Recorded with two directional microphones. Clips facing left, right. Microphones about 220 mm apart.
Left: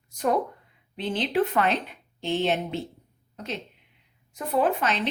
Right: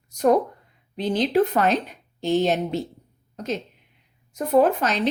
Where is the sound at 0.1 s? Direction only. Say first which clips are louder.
Right 7 dB; 40° right (ahead or behind).